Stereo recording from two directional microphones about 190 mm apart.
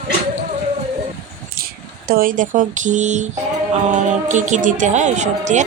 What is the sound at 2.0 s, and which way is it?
Speech, 50° right (ahead or behind).